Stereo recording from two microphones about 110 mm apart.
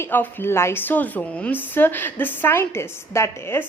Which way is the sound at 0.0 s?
20° left (ahead or behind).